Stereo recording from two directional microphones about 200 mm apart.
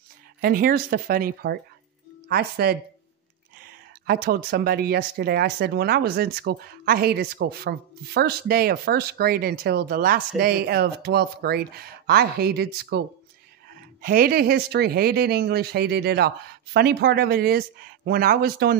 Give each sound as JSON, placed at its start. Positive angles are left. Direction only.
{"t": 0.4, "sound": "speech", "side_deg": -45}